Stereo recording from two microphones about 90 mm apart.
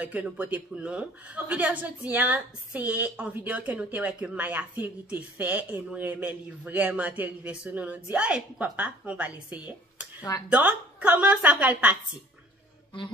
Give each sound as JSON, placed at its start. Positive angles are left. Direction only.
{"t": 0.0, "sound": "a woman's voice", "side_deg": -15}